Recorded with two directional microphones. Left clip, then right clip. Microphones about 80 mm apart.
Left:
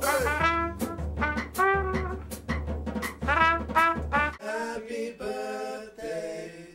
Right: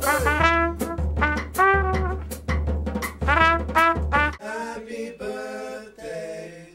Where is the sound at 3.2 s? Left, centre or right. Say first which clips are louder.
Right 5 dB; right.